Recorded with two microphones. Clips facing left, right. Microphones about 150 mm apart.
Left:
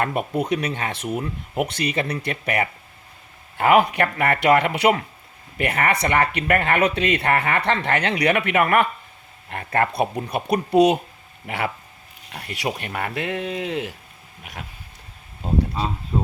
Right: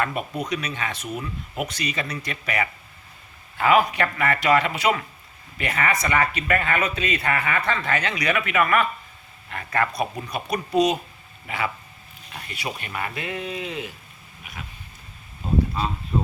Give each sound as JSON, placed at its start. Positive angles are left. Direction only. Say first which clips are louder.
{"t": 0.0, "sound": "speech", "louder": "left 4 dB", "side_deg": 60}